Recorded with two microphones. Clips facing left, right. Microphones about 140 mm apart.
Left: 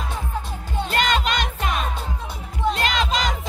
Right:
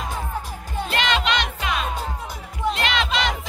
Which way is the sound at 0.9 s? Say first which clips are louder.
Left 1 dB; 45° left (ahead or behind).